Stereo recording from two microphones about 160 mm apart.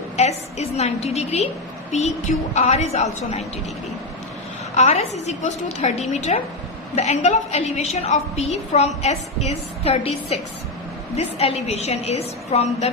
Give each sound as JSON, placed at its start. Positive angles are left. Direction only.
{"t": 0.2, "sound": "a woman's voice", "side_deg": 45}
{"t": 4.7, "sound": "a woman's voice", "side_deg": 45}